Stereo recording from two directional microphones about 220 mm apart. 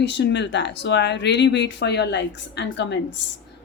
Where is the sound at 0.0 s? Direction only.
50° left (ahead or behind).